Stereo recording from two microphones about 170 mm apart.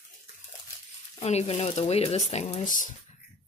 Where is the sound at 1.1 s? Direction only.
40° left (ahead or behind).